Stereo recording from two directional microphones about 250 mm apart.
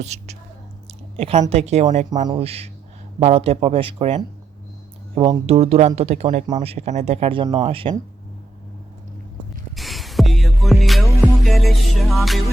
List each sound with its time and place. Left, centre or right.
0.0 s speech: right
9.7 s music: centre